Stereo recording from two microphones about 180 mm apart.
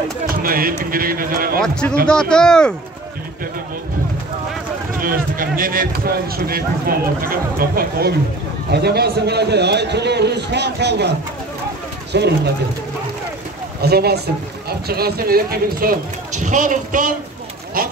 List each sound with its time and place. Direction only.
0.3 s a sound: 50° right (ahead or behind)
0.8 s speech: 55° right (ahead or behind)
1.6 s speech: 5° left (ahead or behind)
5.0 s a man's voice: 50° right (ahead or behind); by 12.4 s 70° right (ahead or behind)
13.7 s speech: 60° right (ahead or behind)